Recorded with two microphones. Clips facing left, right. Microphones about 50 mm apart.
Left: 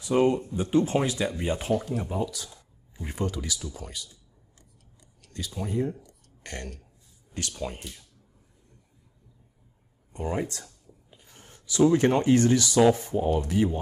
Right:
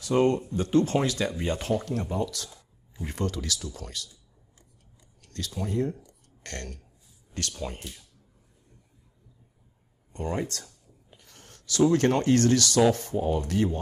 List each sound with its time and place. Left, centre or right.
0.0 s speech: centre
5.3 s speech: centre
10.1 s speech: centre